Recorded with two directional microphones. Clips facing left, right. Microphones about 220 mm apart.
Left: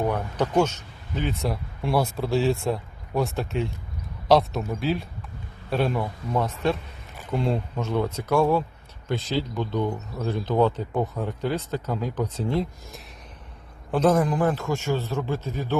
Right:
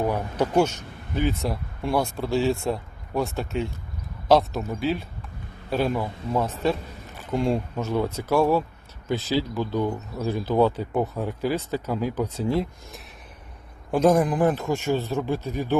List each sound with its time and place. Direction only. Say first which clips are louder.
0.0 s speech: right 1 dB; 10° right (ahead or behind)
1.4 s speech: even; centre (ahead or behind)